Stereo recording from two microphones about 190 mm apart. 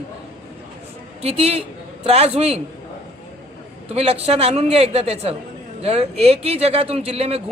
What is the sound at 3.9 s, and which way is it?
A woman's voice, 30° right (ahead or behind).